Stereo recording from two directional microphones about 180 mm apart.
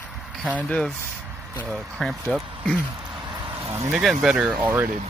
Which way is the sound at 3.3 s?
25° right (ahead or behind).